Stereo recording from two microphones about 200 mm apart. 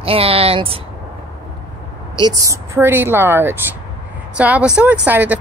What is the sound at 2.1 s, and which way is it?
A woman's voice, 20° right (ahead or behind).